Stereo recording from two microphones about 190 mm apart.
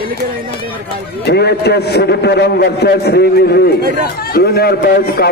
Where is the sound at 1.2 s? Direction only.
60° left (ahead or behind).